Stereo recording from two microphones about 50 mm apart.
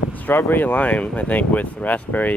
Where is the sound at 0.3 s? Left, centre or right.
Left.